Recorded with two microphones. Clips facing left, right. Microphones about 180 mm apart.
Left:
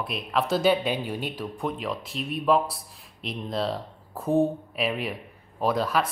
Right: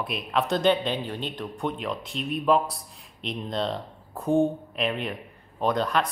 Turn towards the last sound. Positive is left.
turn(degrees=5)  # may be behind; listen again after turning